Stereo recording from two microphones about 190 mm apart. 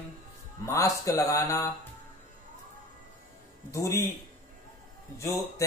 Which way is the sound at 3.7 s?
15° left (ahead or behind).